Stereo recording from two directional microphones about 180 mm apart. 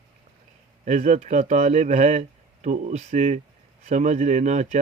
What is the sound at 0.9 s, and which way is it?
Speech, 40° right (ahead or behind).